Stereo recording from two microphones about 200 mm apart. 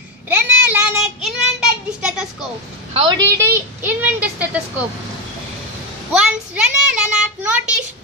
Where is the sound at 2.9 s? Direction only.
25° right (ahead or behind).